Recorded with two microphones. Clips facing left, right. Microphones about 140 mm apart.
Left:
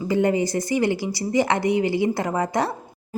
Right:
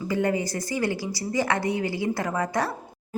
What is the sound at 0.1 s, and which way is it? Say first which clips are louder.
A woman's voice: left 5 dB; 25° left (ahead or behind).